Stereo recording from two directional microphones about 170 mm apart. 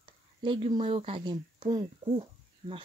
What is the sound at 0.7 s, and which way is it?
Speech, 35° right (ahead or behind).